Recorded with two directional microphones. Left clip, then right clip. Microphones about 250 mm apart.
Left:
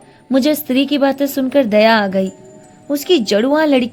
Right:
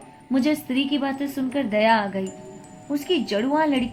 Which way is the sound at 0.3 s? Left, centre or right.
Left.